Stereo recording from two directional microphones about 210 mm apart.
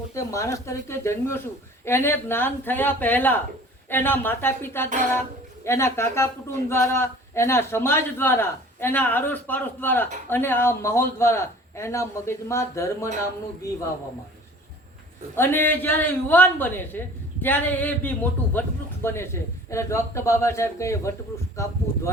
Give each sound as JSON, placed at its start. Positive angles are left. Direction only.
{"t": 0.1, "sound": "a woman's voice", "side_deg": 15}
{"t": 15.4, "sound": "a woman's voice", "side_deg": 10}